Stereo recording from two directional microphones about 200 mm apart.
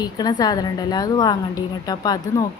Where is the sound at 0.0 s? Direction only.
20° left (ahead or behind).